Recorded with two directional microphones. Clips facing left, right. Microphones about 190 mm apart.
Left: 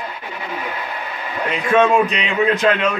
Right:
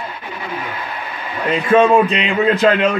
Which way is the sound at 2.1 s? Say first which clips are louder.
Right 2 dB; 30° right (ahead or behind).